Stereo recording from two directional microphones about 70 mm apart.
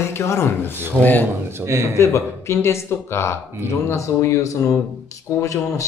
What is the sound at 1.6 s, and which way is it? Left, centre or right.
Speech, right.